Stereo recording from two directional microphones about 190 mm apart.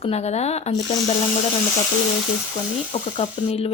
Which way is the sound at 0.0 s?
35° left (ahead or behind).